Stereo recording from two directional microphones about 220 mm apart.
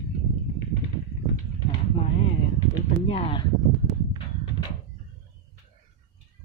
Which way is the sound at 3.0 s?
25° left (ahead or behind).